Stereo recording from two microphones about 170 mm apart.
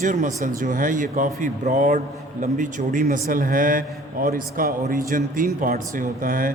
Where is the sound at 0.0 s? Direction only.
45° right (ahead or behind).